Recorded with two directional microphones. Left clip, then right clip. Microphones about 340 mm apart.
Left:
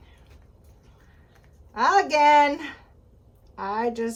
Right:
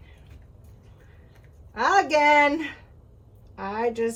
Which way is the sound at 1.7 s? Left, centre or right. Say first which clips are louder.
Even; centre.